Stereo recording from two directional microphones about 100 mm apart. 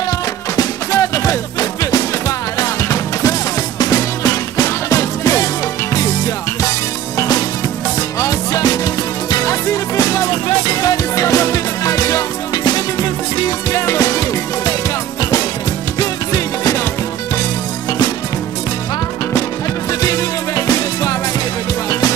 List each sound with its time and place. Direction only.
0.6 s music: 35° left (ahead or behind)
16.0 s music: 35° left (ahead or behind)
19.9 s music: 35° left (ahead or behind)